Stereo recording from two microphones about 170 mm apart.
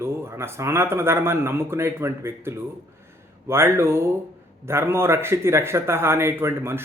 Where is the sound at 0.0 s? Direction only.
15° right (ahead or behind).